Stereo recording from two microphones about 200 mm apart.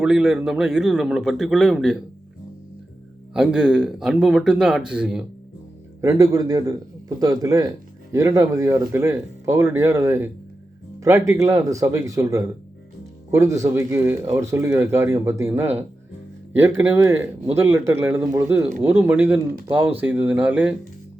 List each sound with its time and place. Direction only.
0.0 s a man's voice: 5° right (ahead or behind)
3.3 s a man's voice: 5° right (ahead or behind)
6.0 s speech: 15° right (ahead or behind)